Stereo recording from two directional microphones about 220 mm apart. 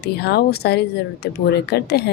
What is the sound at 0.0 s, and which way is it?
Speech, 50° left (ahead or behind).